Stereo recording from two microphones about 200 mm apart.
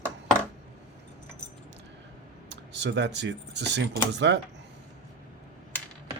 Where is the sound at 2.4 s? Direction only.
60° right (ahead or behind).